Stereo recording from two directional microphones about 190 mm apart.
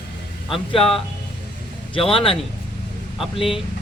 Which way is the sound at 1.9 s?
30° left (ahead or behind).